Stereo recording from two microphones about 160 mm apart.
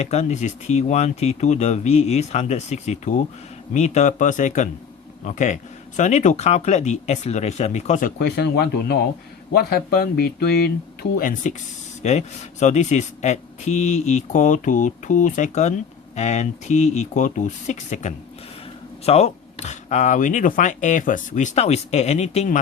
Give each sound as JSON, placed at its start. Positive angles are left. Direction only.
{"t": 0.0, "sound": "speech", "side_deg": 45}
{"t": 8.2, "sound": "speech", "side_deg": 90}
{"t": 9.5, "sound": "speech", "side_deg": 75}
{"t": 11.2, "sound": "speech", "side_deg": 60}
{"t": 12.0, "sound": "speech", "side_deg": 45}